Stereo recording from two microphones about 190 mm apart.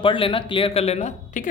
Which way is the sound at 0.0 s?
30° left (ahead or behind).